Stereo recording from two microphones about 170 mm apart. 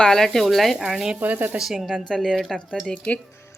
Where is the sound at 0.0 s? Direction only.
5° left (ahead or behind).